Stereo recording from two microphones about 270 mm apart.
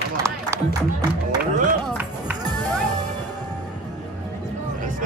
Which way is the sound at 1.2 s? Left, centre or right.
Right.